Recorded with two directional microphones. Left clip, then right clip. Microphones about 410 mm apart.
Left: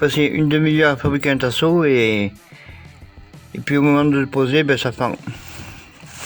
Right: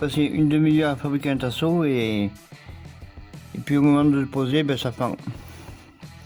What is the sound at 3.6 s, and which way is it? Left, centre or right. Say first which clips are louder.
Speech: left 3 dB; right.